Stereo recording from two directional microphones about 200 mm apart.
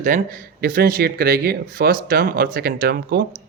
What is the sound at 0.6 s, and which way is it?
Speech, 45° right (ahead or behind).